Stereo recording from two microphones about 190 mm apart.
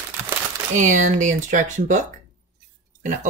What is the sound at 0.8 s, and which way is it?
Speech, 40° right (ahead or behind).